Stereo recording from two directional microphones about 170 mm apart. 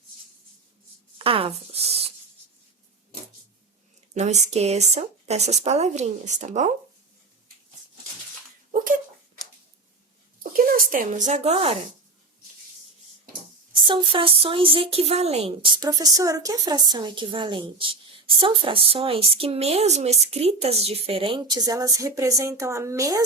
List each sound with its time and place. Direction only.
1.2 s a sound: 35° right (ahead or behind)
4.1 s speech: 40° right (ahead or behind)
8.7 s a sound: 50° right (ahead or behind)
10.5 s speech: 55° right (ahead or behind); by 11.8 s 40° right (ahead or behind)
13.8 s speech: 30° right (ahead or behind)
15.8 s a woman's voice: 20° right (ahead or behind)